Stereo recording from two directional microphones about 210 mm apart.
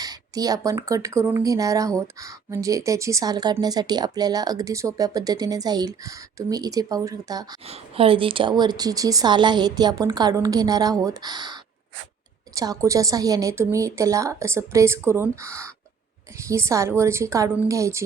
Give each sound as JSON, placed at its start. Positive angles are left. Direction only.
{"t": 0.0, "sound": "a woman's voice", "side_deg": -15}